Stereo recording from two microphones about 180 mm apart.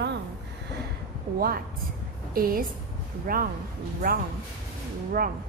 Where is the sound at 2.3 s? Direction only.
55° right (ahead or behind).